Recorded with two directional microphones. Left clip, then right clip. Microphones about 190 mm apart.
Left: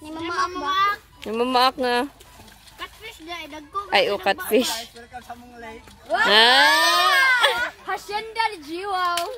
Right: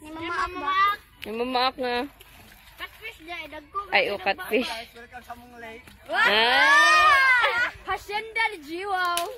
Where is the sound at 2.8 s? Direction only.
45° left (ahead or behind).